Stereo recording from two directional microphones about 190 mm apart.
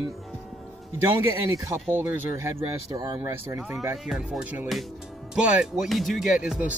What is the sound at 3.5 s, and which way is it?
Speech, 5° right (ahead or behind).